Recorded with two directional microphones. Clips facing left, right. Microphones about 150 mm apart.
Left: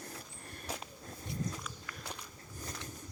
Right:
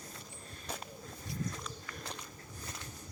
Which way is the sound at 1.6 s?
5° left (ahead or behind).